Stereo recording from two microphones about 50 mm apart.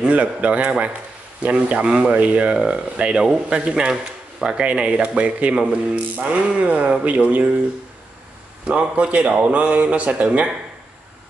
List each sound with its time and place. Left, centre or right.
0.0 s speech: right
8.6 s speech: right